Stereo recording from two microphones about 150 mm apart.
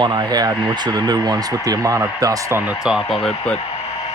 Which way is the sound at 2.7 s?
5° right (ahead or behind).